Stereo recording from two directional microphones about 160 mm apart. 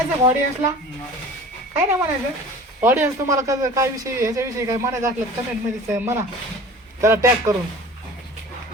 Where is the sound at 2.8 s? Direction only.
15° right (ahead or behind).